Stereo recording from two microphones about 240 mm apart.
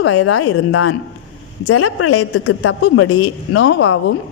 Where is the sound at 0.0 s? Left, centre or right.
Left.